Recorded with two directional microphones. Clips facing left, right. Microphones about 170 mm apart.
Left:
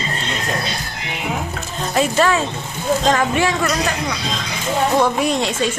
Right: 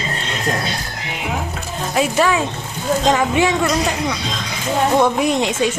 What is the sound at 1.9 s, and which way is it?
A woman's voice, 10° right (ahead or behind).